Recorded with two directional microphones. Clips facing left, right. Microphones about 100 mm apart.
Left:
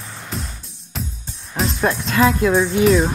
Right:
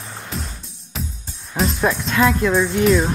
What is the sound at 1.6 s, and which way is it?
Speech, centre (ahead or behind).